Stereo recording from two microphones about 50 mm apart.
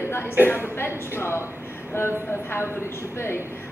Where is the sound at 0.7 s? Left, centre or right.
Left.